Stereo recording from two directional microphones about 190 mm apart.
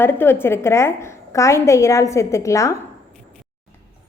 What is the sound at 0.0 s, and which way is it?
A woman's voice, 10° left (ahead or behind).